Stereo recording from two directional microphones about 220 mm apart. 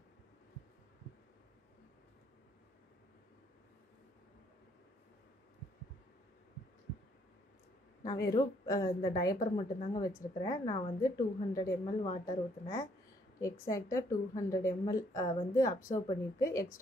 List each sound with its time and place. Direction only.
8.3 s a woman's voice: 15° left (ahead or behind)